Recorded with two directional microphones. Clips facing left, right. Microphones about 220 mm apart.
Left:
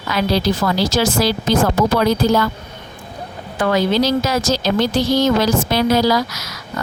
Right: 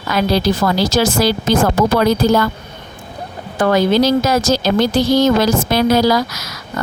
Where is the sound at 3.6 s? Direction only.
45° right (ahead or behind).